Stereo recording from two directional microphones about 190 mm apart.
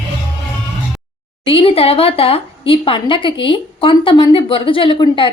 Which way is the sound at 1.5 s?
30° left (ahead or behind).